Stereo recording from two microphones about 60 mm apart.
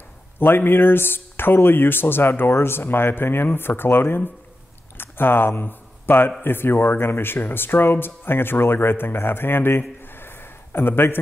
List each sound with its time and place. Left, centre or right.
0.4 s speech: left
4.9 s a sound: left
5.6 s speech: left